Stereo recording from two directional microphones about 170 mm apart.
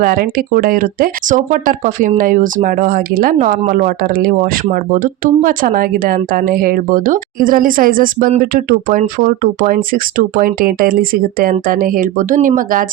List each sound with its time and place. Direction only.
0.0 s speech: 60° right (ahead or behind)